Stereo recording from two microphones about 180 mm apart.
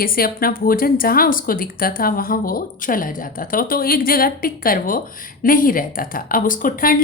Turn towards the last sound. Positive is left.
turn(degrees=50)  # may be behind; listen again after turning